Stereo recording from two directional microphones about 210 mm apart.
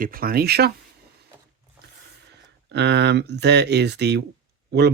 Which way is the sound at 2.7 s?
55° right (ahead or behind).